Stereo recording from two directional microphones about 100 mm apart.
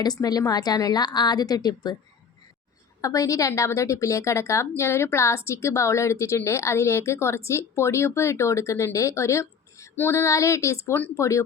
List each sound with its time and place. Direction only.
0.0 s a woman's voice: 40° left (ahead or behind)
3.0 s a woman's voice: 35° left (ahead or behind)